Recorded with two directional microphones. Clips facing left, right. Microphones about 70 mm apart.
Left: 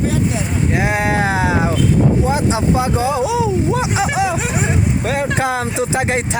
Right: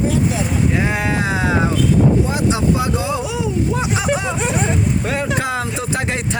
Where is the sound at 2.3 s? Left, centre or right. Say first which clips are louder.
Left 1 dB; left.